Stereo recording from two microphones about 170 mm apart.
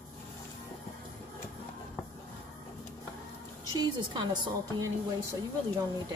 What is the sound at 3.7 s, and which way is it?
A woman's voice, 25° right (ahead or behind).